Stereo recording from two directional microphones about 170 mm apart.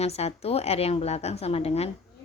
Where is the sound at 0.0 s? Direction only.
40° left (ahead or behind).